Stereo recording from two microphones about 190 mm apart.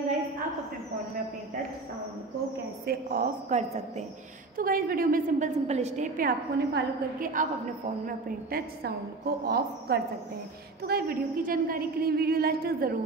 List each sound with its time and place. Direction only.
2.9 s a woman's voice: 50° right (ahead or behind)
4.6 s a woman's voice: 50° right (ahead or behind)